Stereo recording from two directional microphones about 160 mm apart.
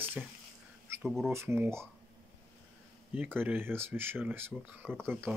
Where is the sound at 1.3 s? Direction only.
15° right (ahead or behind).